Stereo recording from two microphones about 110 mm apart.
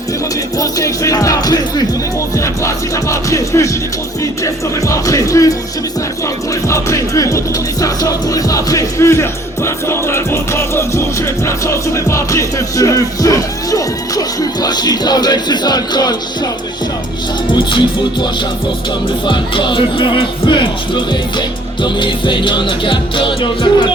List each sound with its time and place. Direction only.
0.6 s music: 30° left (ahead or behind)
17.5 s speech: 45° left (ahead or behind)